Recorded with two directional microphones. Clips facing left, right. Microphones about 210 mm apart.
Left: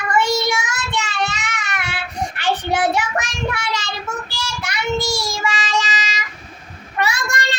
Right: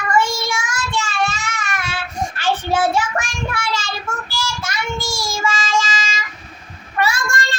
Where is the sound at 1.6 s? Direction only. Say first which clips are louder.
Right 1 dB; 20° left (ahead or behind).